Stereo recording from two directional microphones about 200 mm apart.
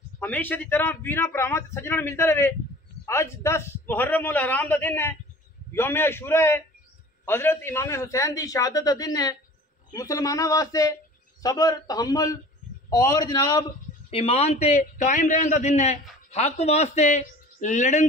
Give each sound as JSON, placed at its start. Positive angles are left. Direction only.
{"t": 0.2, "sound": "a man's voice", "side_deg": 10}
{"t": 14.1, "sound": "a man's voice", "side_deg": 30}